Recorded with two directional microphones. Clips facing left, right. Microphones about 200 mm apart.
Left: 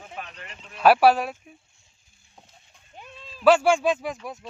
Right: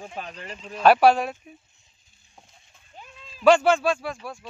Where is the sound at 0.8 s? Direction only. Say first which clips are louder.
Even; 5° left (ahead or behind).